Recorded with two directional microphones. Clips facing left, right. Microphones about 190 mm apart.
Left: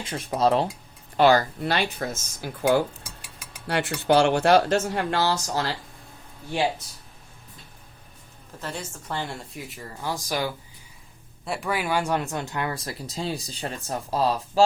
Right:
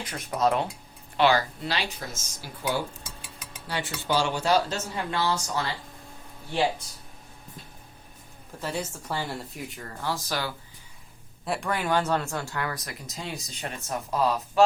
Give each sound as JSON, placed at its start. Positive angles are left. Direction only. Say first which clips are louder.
{"t": 0.0, "sound": "speech", "louder": "left 3 dB", "side_deg": 30}
{"t": 1.1, "sound": "speech", "louder": "left 4 dB", "side_deg": 45}
{"t": 3.7, "sound": "cutlery", "louder": "left 6 dB", "side_deg": 65}
{"t": 4.0, "sound": "speech", "louder": "left 7 dB", "side_deg": 65}
{"t": 8.6, "sound": "a woman's voice", "louder": "right 3 dB", "side_deg": -10}
{"t": 10.0, "sound": "speech", "louder": "left 3 dB", "side_deg": 15}
{"t": 11.4, "sound": "speech", "louder": "left 1 dB", "side_deg": 0}